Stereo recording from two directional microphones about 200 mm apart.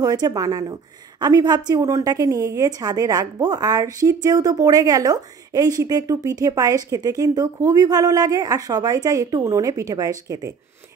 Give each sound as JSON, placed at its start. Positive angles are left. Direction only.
{"t": 0.0, "sound": "a woman's voice", "side_deg": -20}